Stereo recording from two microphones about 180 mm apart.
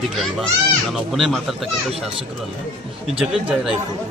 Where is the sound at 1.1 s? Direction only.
Centre (ahead or behind).